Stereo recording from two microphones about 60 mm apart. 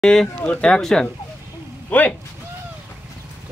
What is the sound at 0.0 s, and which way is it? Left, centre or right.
Speech, centre.